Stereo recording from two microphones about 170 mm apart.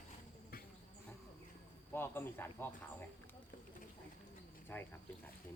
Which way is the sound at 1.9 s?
15° left (ahead or behind).